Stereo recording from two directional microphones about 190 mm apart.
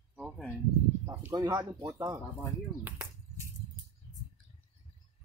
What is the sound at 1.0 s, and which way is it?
Speech, 15° right (ahead or behind).